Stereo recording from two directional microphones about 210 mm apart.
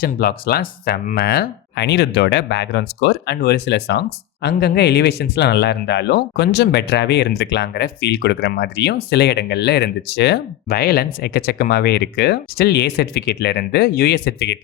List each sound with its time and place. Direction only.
0.0 s speech: 45° left (ahead or behind)